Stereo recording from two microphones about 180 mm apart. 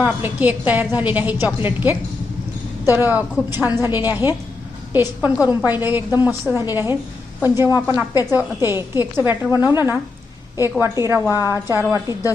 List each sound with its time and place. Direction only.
0.0 s a woman's voice: 10° right (ahead or behind)
8.1 s a woman's voice: 20° left (ahead or behind)
8.4 s a woman's voice: 10° right (ahead or behind)
11.3 s a woman's voice: 20° left (ahead or behind)
11.7 s a woman's voice: 15° right (ahead or behind)